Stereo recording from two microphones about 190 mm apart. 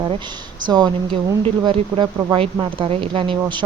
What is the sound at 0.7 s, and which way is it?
A woman's voice, 20° right (ahead or behind).